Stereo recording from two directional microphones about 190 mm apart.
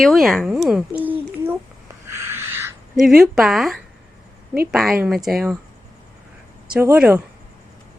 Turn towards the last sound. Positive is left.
turn(degrees=-10)  # may be behind; listen again after turning